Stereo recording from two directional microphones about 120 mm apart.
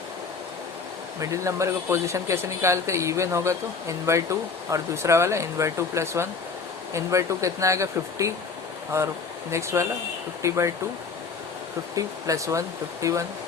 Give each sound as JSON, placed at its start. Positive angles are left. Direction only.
{"t": 1.2, "sound": "speech", "side_deg": -25}
{"t": 11.9, "sound": "speech", "side_deg": -30}